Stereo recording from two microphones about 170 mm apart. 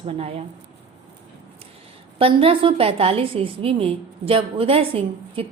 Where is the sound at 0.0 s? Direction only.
35° right (ahead or behind).